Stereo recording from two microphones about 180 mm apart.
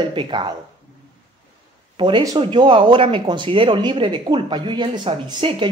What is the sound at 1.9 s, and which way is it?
Speech, 25° right (ahead or behind).